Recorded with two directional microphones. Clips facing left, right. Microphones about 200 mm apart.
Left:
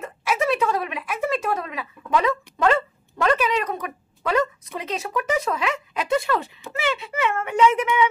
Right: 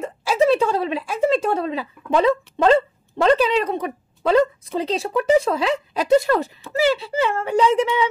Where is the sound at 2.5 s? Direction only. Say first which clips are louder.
Right 3 dB; 30° right (ahead or behind).